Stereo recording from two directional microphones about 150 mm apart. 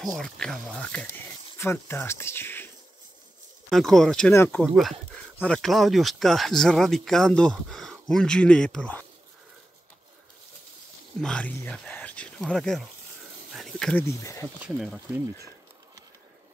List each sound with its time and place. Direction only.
0.2 s speech: 5° left (ahead or behind)
3.7 s speech: centre (ahead or behind)
4.3 s speech: 15° left (ahead or behind)
4.6 s speech: centre (ahead or behind)
11.1 s speech: 5° left (ahead or behind)
13.5 s a sound: centre (ahead or behind)
14.0 s speech: 20° left (ahead or behind)
14.6 s speech: 5° right (ahead or behind)